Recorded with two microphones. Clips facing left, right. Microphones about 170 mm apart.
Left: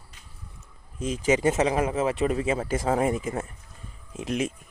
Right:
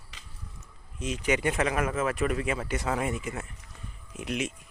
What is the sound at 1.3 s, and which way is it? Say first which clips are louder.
Speech: left 5 dB; 25° left (ahead or behind).